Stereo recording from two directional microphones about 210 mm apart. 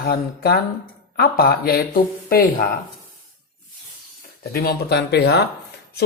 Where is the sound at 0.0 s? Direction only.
45° left (ahead or behind).